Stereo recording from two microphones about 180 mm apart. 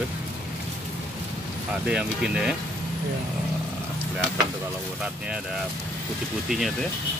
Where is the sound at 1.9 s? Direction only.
5° right (ahead or behind).